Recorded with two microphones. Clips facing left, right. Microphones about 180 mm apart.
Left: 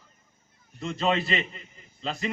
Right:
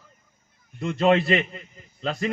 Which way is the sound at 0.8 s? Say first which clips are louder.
Right 7 dB; 55° right (ahead or behind).